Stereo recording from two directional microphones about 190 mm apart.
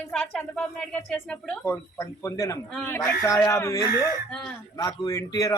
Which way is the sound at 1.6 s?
15° left (ahead or behind).